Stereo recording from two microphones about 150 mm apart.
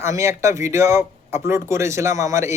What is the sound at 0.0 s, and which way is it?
Speech, 20° right (ahead or behind).